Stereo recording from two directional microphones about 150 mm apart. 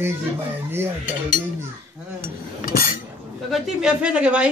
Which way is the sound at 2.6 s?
75° left (ahead or behind).